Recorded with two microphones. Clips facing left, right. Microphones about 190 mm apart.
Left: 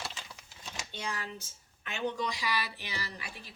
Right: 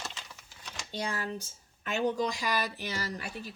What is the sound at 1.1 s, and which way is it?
Speech, 40° right (ahead or behind).